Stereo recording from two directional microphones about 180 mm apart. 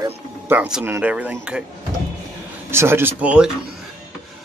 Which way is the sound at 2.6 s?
15° right (ahead or behind).